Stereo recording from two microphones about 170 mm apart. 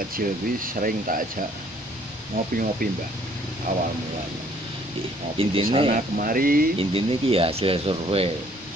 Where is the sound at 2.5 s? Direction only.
55° right (ahead or behind).